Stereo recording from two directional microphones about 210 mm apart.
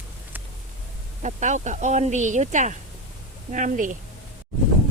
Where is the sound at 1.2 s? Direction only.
35° right (ahead or behind).